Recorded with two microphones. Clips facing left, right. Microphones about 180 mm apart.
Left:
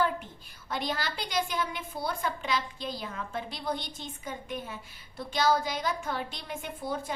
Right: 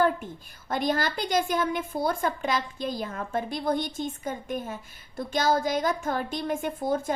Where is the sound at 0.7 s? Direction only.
50° right (ahead or behind).